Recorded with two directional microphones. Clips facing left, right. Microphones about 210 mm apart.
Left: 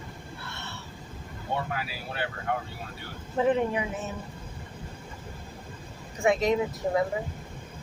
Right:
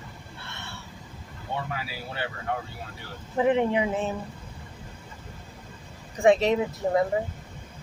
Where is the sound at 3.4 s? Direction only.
20° right (ahead or behind).